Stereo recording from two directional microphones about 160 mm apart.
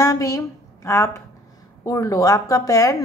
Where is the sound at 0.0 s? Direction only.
20° left (ahead or behind).